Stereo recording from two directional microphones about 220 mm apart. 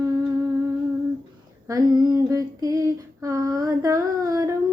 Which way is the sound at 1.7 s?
15° right (ahead or behind).